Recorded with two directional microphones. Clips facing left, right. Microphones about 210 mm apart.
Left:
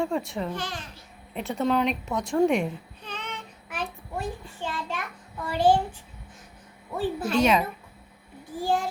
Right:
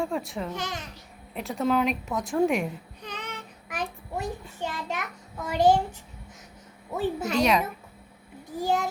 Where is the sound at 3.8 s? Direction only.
15° right (ahead or behind).